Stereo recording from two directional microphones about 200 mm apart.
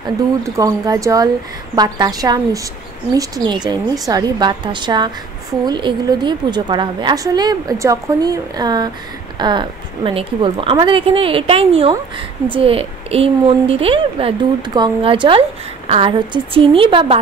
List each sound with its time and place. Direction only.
0.6 s a woman's voice: 15° right (ahead or behind)